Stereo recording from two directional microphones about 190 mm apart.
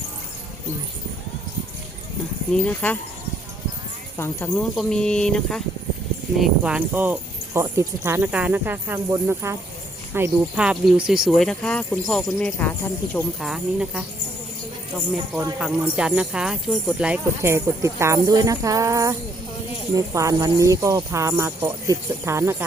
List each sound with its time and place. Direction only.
2.5 s speech: 10° left (ahead or behind)
4.2 s speech: 10° left (ahead or behind)
15.5 s speech: 5° right (ahead or behind)
20.1 s speech: 15° right (ahead or behind)